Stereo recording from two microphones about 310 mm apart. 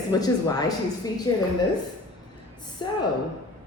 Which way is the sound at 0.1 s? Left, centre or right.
Centre.